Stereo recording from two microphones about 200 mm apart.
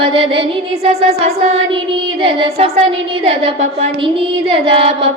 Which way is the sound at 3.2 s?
30° right (ahead or behind).